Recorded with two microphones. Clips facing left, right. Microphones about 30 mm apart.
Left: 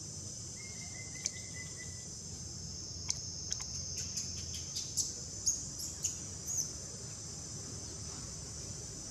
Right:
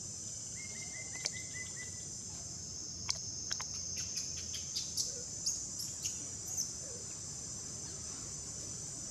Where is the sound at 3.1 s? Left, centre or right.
Right.